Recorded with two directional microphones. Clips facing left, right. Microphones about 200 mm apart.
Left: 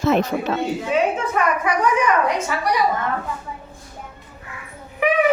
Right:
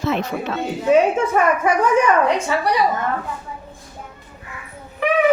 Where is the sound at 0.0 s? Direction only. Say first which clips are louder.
Left 3 dB; 40° left (ahead or behind).